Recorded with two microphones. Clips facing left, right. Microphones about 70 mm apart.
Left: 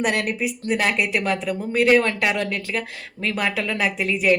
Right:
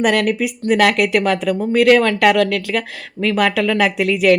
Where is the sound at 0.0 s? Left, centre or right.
Right.